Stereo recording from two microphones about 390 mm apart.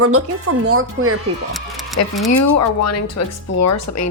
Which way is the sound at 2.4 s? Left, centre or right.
Left.